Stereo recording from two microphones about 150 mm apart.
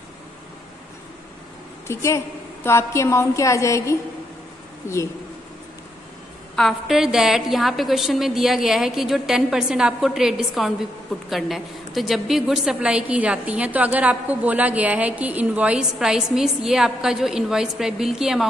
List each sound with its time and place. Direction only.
1.9 s a woman's voice: 20° left (ahead or behind)
6.5 s a woman's voice: centre (ahead or behind)